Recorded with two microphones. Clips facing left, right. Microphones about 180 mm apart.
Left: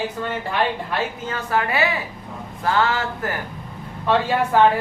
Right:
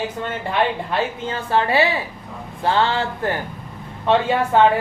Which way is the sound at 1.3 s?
30° right (ahead or behind).